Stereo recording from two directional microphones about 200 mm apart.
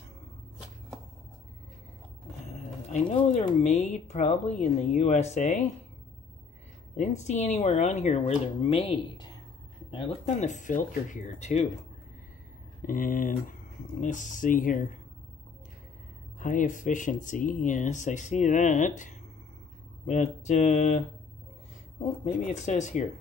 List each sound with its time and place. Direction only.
2.4 s speech: 35° left (ahead or behind)
7.0 s speech: 35° left (ahead or behind)
12.8 s speech: 45° left (ahead or behind)
16.3 s speech: 40° left (ahead or behind)
22.2 s speech: 35° left (ahead or behind)